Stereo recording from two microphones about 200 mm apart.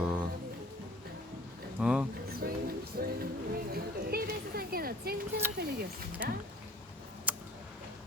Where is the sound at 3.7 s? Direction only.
50° right (ahead or behind).